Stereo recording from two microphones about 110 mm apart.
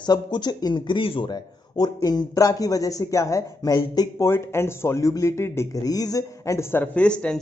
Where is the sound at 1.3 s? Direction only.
35° left (ahead or behind).